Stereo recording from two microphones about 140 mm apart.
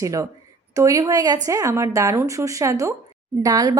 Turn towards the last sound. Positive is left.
turn(degrees=-30)  # may be behind; listen again after turning